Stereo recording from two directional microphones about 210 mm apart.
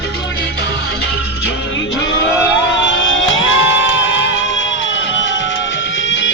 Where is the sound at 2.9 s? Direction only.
65° left (ahead or behind).